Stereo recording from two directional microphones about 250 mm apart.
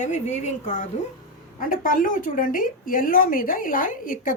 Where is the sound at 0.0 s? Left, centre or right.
Left.